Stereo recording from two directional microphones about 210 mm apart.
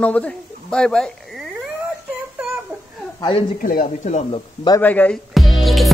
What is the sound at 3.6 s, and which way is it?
Speech, 40° left (ahead or behind).